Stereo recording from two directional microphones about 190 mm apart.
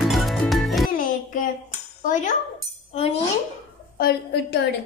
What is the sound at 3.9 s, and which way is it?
Speech, 55° left (ahead or behind).